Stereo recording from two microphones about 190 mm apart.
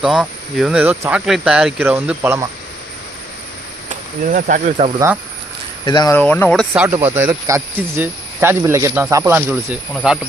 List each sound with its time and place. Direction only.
0.0 s speech: centre (ahead or behind)
4.3 s speech: 45° right (ahead or behind)
5.8 s speech: 20° left (ahead or behind)
6.1 s speech: 10° left (ahead or behind)
6.8 s speech: 10° right (ahead or behind)